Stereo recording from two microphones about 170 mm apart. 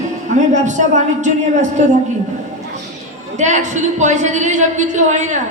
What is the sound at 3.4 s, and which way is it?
A woman's voice, 45° right (ahead or behind).